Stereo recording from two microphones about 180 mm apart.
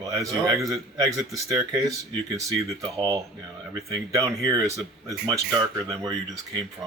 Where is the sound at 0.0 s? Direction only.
20° right (ahead or behind).